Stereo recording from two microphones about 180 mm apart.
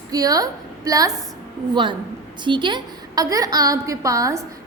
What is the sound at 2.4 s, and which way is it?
A woman's voice, 25° right (ahead or behind).